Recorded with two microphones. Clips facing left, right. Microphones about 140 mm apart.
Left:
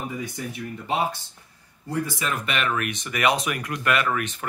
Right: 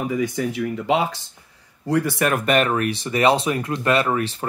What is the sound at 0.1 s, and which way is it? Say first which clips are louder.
Speech: right 9 dB; 90° right.